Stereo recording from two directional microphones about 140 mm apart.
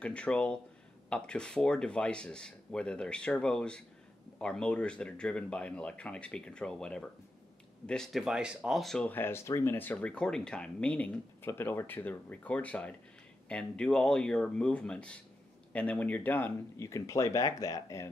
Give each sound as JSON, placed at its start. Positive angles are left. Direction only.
{"t": 0.0, "sound": "speech", "side_deg": 10}